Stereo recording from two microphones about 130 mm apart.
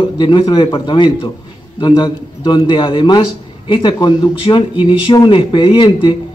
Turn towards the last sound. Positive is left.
turn(degrees=40)  # may be behind; listen again after turning